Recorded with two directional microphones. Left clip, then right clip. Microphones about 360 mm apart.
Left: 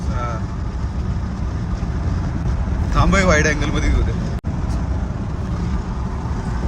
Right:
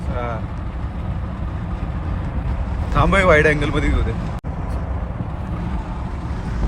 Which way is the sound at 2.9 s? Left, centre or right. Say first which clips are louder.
Right 2 dB; centre.